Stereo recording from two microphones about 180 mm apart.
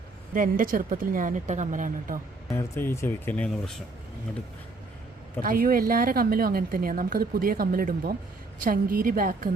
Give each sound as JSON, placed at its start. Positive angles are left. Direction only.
{"t": 0.3, "sound": "speech", "side_deg": -50}
{"t": 2.5, "sound": "speech", "side_deg": 15}
{"t": 5.4, "sound": "speech", "side_deg": -50}